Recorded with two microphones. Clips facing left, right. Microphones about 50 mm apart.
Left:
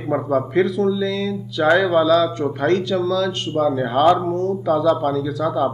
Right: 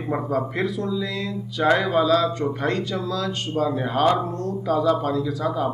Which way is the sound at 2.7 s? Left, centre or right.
Left.